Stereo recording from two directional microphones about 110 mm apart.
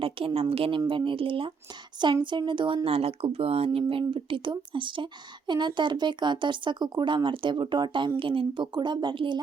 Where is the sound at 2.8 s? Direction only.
60° right (ahead or behind); by 9.4 s 45° right (ahead or behind).